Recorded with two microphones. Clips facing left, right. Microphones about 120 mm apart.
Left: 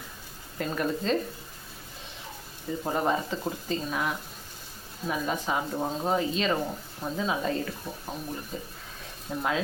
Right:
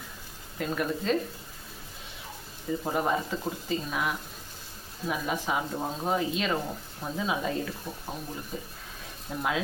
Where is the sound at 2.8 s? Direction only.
Centre (ahead or behind).